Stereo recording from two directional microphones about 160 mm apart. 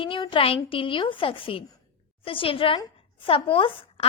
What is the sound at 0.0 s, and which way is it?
A woman's voice, 30° left (ahead or behind).